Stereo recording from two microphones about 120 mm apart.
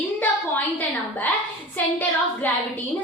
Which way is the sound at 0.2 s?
15° left (ahead or behind).